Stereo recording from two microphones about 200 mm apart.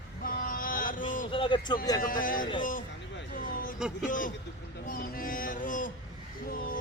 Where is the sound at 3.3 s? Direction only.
45° left (ahead or behind).